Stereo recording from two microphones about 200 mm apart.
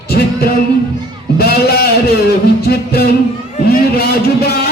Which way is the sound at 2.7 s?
50° left (ahead or behind).